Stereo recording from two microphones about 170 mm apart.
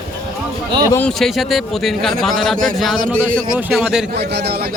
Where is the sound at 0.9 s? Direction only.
5° left (ahead or behind).